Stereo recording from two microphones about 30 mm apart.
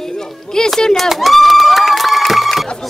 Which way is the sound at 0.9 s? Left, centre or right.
Centre.